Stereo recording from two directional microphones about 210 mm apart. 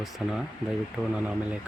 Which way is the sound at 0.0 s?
Centre (ahead or behind).